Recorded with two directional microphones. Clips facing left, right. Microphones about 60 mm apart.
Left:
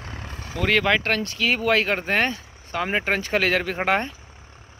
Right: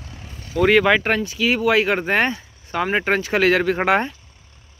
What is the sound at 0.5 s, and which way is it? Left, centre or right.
Speech, centre.